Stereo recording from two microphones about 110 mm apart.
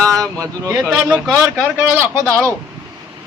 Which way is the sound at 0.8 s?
5° right (ahead or behind).